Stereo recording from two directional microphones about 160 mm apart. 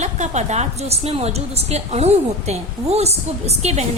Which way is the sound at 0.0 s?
45° right (ahead or behind).